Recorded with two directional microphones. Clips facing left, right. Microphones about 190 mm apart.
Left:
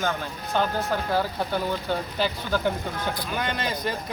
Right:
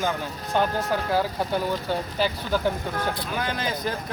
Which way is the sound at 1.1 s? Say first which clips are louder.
Right 1 dB; 10° right (ahead or behind).